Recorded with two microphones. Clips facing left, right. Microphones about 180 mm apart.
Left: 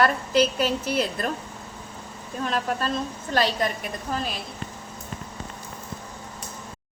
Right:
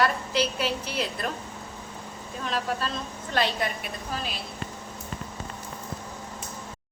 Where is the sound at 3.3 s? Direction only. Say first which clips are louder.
Left 3 dB; 40° left (ahead or behind).